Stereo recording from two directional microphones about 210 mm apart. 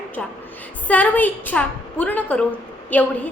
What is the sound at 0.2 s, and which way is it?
A woman's voice, 5° left (ahead or behind).